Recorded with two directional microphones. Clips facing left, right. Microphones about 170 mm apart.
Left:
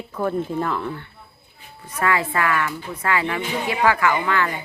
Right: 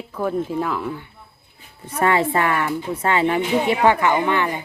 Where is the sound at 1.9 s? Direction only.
25° right (ahead or behind).